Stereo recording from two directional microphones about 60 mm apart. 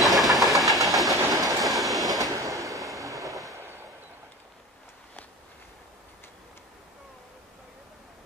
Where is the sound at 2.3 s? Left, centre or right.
Right.